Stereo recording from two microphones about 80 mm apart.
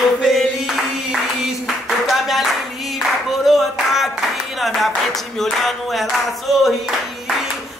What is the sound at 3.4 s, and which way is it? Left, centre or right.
Clapping, centre.